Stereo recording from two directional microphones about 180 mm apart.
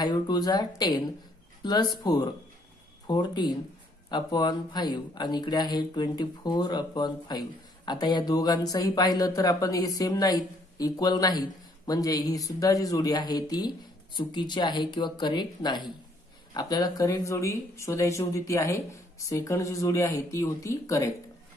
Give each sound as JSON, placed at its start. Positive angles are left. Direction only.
{"t": 0.0, "sound": "speech", "side_deg": 20}